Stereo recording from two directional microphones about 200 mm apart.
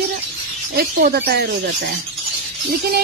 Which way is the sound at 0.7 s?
50° right (ahead or behind).